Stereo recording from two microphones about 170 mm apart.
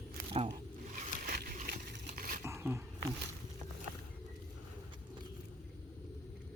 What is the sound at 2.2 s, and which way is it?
Roaring cats, 55° right (ahead or behind).